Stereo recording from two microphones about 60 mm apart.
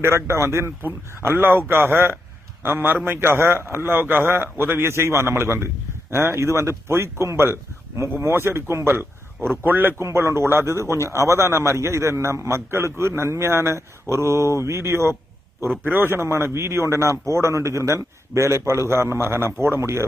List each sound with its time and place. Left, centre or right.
0.0 s a man's voice: right
9.4 s a man's voice: right
10.0 s a man's voice: right
15.8 s a man's voice: right